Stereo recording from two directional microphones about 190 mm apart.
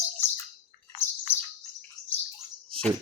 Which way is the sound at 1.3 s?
10° left (ahead or behind).